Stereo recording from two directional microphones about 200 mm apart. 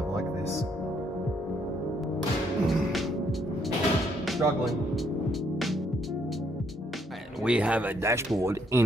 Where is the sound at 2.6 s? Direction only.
Centre (ahead or behind).